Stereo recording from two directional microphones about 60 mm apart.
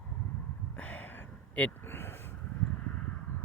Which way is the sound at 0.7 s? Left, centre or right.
Left.